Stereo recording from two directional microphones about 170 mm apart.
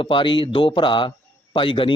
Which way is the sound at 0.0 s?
30° left (ahead or behind).